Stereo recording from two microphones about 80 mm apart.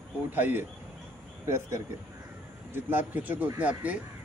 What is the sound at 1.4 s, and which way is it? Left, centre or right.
Speech, right.